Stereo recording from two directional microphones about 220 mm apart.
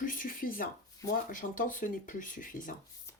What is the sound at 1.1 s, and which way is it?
Speech, 35° left (ahead or behind).